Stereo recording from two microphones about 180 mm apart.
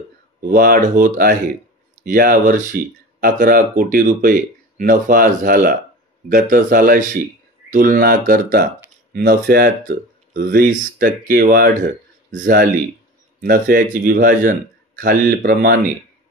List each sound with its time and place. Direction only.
0.4 s speech: 50° right (ahead or behind)